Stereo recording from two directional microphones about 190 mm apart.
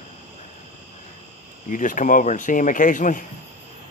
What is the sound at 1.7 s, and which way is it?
Speech, 45° left (ahead or behind).